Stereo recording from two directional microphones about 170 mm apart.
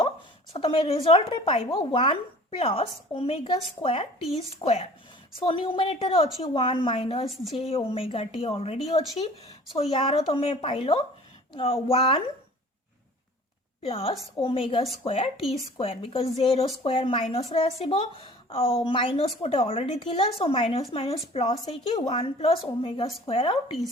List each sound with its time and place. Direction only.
0.5 s speech: 30° left (ahead or behind)
13.8 s speech: 35° left (ahead or behind)